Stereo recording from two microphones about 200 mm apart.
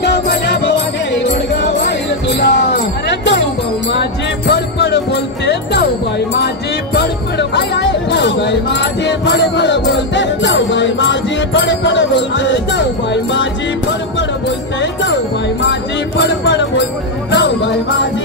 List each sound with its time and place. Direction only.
0.0 s music: 55° left (ahead or behind)
4.5 s jingle bell: 55° left (ahead or behind)
6.3 s music: 55° left (ahead or behind)
14.8 s music: 65° left (ahead or behind)
16.2 s music: 60° left (ahead or behind)